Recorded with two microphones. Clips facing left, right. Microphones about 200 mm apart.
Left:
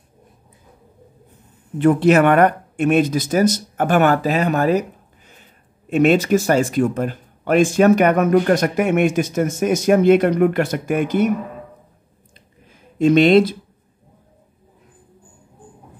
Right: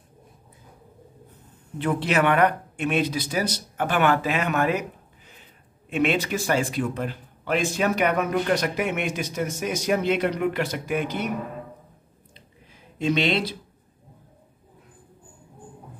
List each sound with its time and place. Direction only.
1.8 s a man's voice: 45° left (ahead or behind)
5.9 s a man's voice: 40° left (ahead or behind)
13.0 s a man's voice: 50° left (ahead or behind)